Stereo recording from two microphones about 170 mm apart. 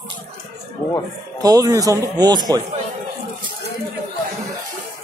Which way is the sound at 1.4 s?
20° right (ahead or behind).